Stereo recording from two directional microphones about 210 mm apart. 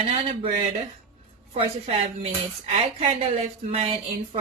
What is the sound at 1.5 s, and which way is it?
Speech, 30° right (ahead or behind).